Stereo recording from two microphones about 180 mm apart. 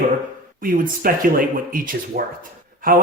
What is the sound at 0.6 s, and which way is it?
Speech, 50° right (ahead or behind).